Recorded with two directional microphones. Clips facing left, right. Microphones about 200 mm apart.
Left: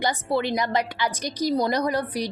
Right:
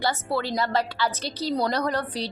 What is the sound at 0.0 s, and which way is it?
A woman's voice, 20° left (ahead or behind).